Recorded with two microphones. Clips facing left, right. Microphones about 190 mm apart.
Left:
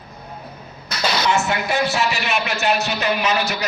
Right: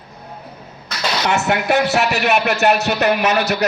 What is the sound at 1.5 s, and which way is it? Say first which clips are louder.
Speech: right 5 dB; 65° right (ahead or behind).